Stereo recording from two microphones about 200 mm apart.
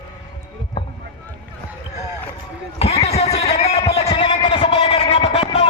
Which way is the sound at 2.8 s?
30° left (ahead or behind).